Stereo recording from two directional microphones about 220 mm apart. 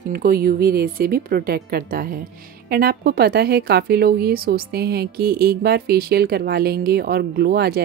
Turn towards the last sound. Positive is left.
turn(degrees=-45)  # may be behind; listen again after turning